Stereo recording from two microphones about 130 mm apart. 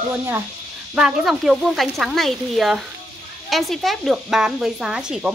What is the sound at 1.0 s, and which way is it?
Speech, 5° right (ahead or behind).